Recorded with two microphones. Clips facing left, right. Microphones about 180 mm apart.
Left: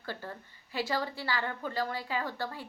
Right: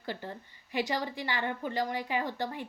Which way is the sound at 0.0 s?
20° right (ahead or behind).